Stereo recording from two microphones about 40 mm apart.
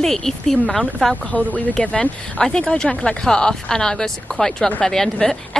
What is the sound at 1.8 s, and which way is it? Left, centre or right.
Speech, left.